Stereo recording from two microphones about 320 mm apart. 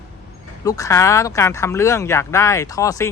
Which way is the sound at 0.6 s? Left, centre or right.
Centre.